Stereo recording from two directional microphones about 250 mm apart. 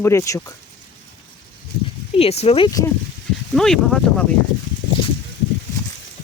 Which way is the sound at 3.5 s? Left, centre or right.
Centre.